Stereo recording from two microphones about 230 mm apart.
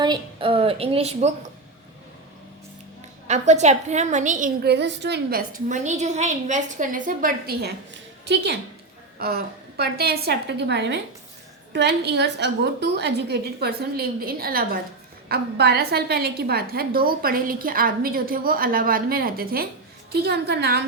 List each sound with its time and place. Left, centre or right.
0.0 s a woman's voice: right
3.2 s a woman's voice: right